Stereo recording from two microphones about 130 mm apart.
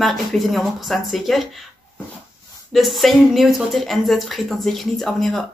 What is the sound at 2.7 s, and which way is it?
Speech, centre (ahead or behind).